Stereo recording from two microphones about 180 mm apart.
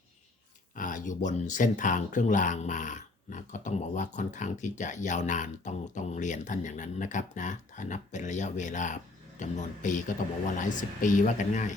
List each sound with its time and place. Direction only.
0.8 s speech: 45° left (ahead or behind)